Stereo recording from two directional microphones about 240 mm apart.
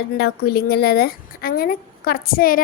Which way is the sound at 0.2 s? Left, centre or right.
Left.